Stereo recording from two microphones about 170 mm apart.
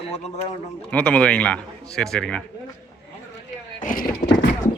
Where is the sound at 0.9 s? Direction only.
5° left (ahead or behind).